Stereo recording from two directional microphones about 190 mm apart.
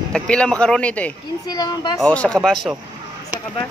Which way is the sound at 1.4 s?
20° left (ahead or behind).